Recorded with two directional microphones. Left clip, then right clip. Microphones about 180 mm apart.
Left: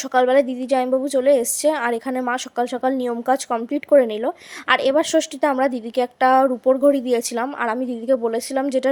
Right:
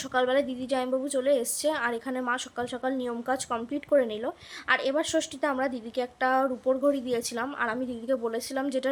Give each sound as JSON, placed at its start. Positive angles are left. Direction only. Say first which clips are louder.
{"t": 0.1, "sound": "a woman's voice", "louder": "left 9 dB", "side_deg": 35}